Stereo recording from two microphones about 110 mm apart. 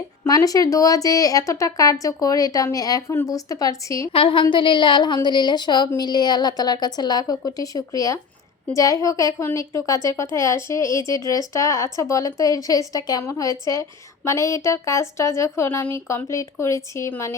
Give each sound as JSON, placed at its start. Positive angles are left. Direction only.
{"t": 0.3, "sound": "speech", "side_deg": 35}
{"t": 4.1, "sound": "a woman's voice", "side_deg": 55}